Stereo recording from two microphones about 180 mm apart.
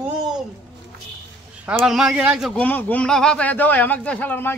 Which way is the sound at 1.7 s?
Centre (ahead or behind).